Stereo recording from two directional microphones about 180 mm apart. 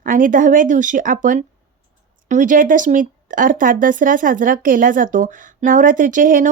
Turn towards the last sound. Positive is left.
turn(degrees=-50)  # may be behind; listen again after turning